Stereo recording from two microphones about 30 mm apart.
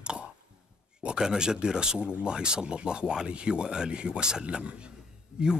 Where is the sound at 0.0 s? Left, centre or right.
Right.